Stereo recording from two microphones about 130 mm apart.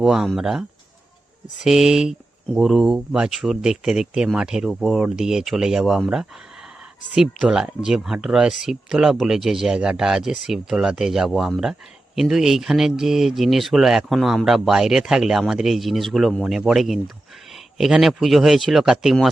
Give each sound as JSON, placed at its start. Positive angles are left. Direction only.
{"t": 0.0, "sound": "speech", "side_deg": -5}
{"t": 1.6, "sound": "speech", "side_deg": -5}